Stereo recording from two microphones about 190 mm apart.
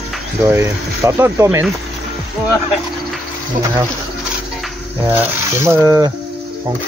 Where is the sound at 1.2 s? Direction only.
15° right (ahead or behind).